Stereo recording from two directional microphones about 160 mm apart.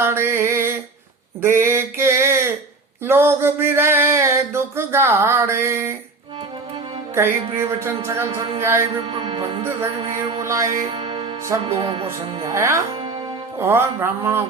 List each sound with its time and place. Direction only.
0.0 s music: 15° right (ahead or behind)
1.4 s a sound: 15° right (ahead or behind)
7.5 s speech: 15° right (ahead or behind)
9.0 s music: 35° right (ahead or behind)
10.0 s speech: 30° right (ahead or behind)
10.4 s speech: 20° right (ahead or behind)
10.7 s music: 40° right (ahead or behind)
12.4 s speech: 20° right (ahead or behind)